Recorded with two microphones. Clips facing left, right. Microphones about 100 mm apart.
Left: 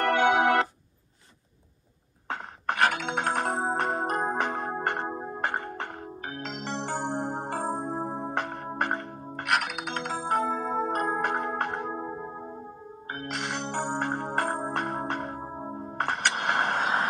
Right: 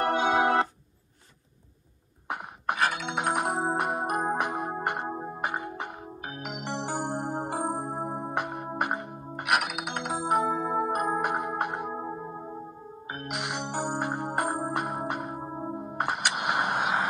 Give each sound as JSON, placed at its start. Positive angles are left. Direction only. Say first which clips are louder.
{"t": 0.0, "sound": "organ", "louder": "left 2 dB", "side_deg": 65}
{"t": 2.2, "sound": "a sound", "louder": "even", "side_deg": -15}
{"t": 3.2, "sound": "music", "louder": "right 3 dB", "side_deg": -15}
{"t": 13.3, "sound": "music", "louder": "even", "side_deg": -10}